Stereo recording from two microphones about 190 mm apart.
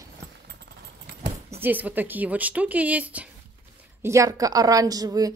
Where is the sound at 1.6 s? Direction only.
10° right (ahead or behind).